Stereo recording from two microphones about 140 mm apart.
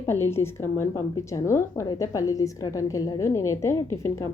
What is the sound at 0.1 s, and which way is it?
A woman's voice, 15° left (ahead or behind).